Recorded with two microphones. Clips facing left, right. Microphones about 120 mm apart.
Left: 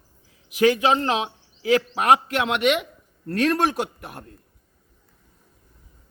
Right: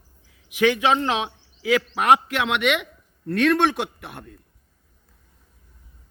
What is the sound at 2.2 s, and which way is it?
Speech, 40° left (ahead or behind).